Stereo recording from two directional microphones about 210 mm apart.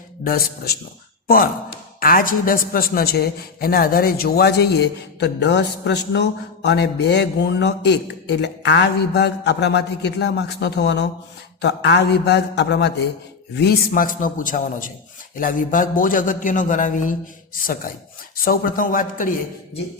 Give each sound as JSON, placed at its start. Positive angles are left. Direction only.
{"t": 0.3, "sound": "speech", "side_deg": 45}
{"t": 2.0, "sound": "a man's voice", "side_deg": 45}